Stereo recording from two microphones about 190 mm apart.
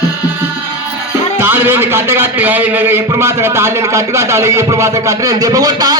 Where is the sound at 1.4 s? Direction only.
10° right (ahead or behind).